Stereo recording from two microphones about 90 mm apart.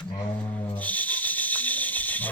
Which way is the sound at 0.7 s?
15° left (ahead or behind).